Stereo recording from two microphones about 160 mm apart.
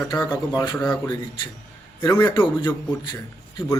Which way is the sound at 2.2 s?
30° left (ahead or behind).